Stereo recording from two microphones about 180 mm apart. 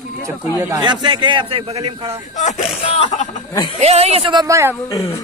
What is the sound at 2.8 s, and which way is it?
Speech, 40° left (ahead or behind).